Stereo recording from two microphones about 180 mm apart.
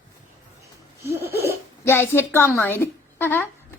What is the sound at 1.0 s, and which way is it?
Laughter, 15° right (ahead or behind).